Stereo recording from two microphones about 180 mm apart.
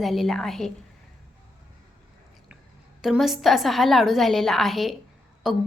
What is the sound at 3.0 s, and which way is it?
A woman's voice, centre (ahead or behind).